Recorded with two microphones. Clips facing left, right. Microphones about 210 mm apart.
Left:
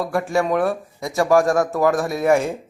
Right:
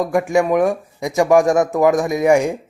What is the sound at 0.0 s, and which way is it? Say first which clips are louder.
Speech: right 4 dB; 15° right (ahead or behind).